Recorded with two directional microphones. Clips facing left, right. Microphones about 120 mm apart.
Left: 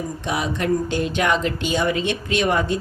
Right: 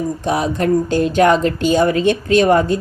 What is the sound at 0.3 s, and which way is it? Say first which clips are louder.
Speech: right 5 dB; 40° right (ahead or behind).